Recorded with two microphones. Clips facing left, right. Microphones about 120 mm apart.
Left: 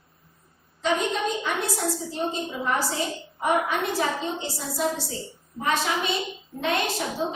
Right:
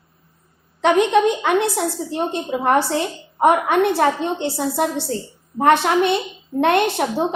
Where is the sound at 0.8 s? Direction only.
70° right (ahead or behind).